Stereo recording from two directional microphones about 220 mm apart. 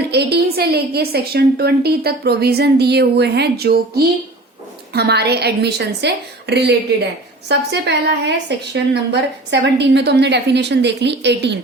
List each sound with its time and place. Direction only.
0.1 s a woman's voice: 50° right (ahead or behind)